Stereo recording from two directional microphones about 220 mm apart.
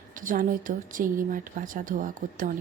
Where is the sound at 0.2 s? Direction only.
40° right (ahead or behind).